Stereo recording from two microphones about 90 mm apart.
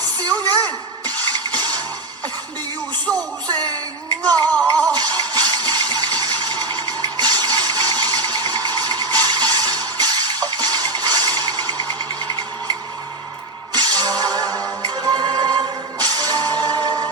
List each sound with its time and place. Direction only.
0.5 s music: 45° right (ahead or behind)
3.1 s music: 10° left (ahead or behind)
3.5 s speech: 50° right (ahead or behind)
4.5 s music: 15° left (ahead or behind)
4.9 s a sound: 45° right (ahead or behind)
13.7 s music: 50° right (ahead or behind)